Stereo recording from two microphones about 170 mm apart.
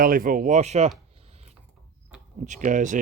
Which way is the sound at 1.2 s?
40° right (ahead or behind).